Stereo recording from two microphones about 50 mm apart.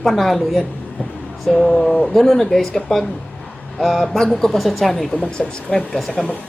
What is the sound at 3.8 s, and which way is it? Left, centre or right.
Speech, centre.